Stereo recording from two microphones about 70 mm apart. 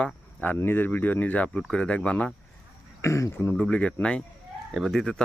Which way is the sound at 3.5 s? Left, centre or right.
Centre.